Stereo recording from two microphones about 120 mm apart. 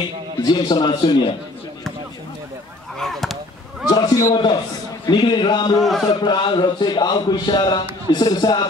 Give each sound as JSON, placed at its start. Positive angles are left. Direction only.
{"t": 0.4, "sound": "speech", "side_deg": 35}
{"t": 3.0, "sound": "a sound", "side_deg": 0}
{"t": 3.9, "sound": "a man's voice", "side_deg": 30}